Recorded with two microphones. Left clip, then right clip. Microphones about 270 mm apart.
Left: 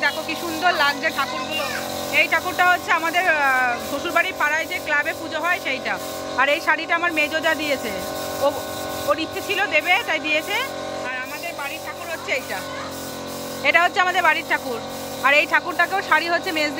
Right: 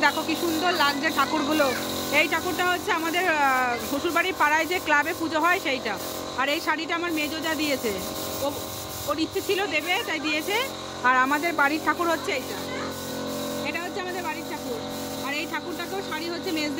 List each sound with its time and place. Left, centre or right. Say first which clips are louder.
0.0 s speech: even; centre
9.1 s speech: left 2 dB; centre
11.1 s speech: right 7 dB; centre
13.7 s speech: left 13 dB; centre